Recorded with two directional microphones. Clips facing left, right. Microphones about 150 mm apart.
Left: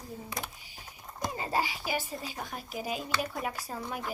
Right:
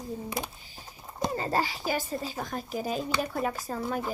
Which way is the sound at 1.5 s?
10° left (ahead or behind).